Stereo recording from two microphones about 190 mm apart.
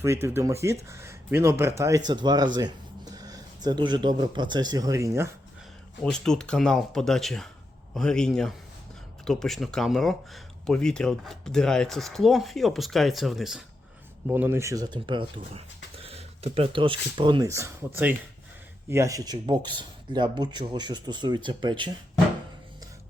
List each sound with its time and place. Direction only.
0.0 s speech: 15° right (ahead or behind)
6.0 s speech: 5° left (ahead or behind); by 21.9 s 25° right (ahead or behind)